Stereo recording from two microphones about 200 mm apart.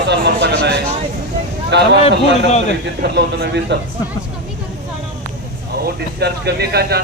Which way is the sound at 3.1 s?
55° right (ahead or behind).